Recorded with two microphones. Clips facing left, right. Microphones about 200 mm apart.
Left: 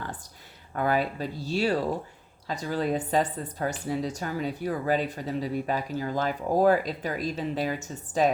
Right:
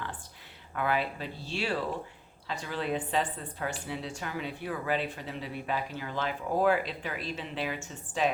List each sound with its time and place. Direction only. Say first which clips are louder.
0.7 s speech: left 4 dB; 40° left (ahead or behind)